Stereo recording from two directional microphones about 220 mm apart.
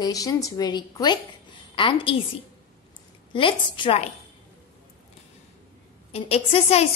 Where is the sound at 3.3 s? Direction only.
25° left (ahead or behind).